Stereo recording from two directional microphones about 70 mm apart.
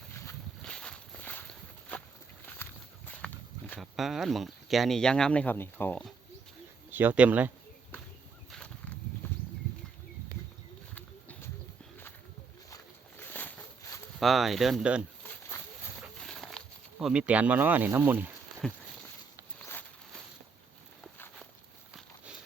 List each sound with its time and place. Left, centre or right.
0.1 s a sound: left
0.6 s walk: centre
1.1 s walk: left
3.8 s speech: centre
5.5 s speech: left
6.9 s speech: right
13.1 s a sound: left
14.2 s speech: centre
15.2 s a sound: left
16.0 s a sound: centre
17.1 s speech: centre
18.6 s speech: centre